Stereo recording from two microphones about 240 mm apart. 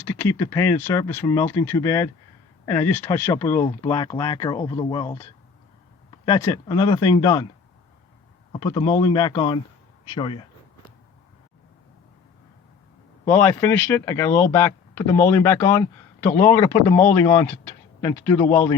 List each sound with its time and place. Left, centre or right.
0.0 s speech: centre
8.5 s speech: centre
13.2 s speech: centre